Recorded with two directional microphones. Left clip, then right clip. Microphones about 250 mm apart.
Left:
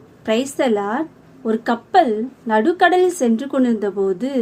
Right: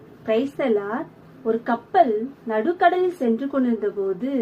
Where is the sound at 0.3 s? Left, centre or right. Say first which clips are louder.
Left 3 dB; left.